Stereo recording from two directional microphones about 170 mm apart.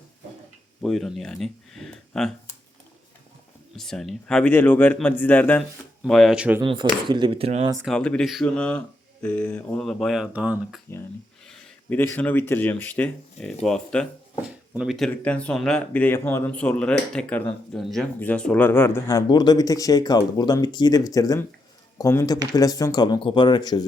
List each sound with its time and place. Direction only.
0.8 s speech: centre (ahead or behind)
3.8 s speech: 5° left (ahead or behind)
6.6 s speech: 25° right (ahead or behind)
7.9 s speech: 5° left (ahead or behind)
11.4 s speech: 5° left (ahead or behind); by 23.8 s 25° left (ahead or behind)